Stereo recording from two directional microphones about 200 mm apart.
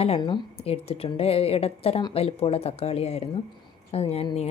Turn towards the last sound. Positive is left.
turn(degrees=30)  # may be behind; listen again after turning